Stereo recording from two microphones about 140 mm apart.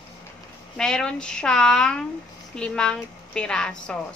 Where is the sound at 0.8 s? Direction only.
5° left (ahead or behind).